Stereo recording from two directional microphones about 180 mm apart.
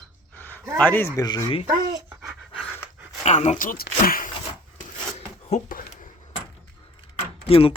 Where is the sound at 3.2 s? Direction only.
40° left (ahead or behind).